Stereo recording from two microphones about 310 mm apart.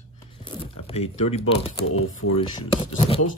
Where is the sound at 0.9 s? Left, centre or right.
Left.